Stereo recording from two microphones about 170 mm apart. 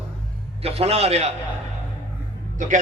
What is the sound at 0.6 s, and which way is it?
Speech, 35° right (ahead or behind).